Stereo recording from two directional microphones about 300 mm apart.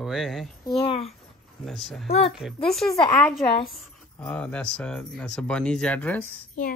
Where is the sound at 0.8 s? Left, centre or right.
Centre.